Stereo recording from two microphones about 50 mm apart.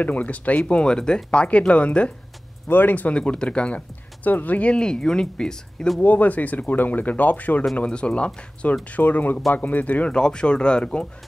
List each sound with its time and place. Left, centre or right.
0.0 s speech: left
0.6 s speech: left
2.7 s speech: left
3.2 s speech: centre
4.7 s speech: centre
5.9 s speech: left
7.7 s speech: left
8.9 s speech: left
10.1 s speech: centre